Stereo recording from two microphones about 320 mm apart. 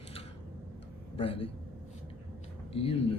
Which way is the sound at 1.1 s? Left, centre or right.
Centre.